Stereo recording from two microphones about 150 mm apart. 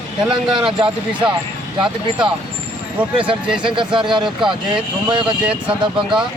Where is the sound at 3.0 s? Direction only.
10° right (ahead or behind).